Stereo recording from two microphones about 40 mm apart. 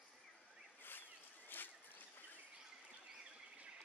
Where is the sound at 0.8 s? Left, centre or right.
Left.